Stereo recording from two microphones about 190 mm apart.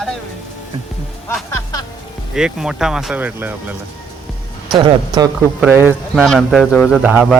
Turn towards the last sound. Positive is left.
turn(degrees=-10)  # may be behind; listen again after turning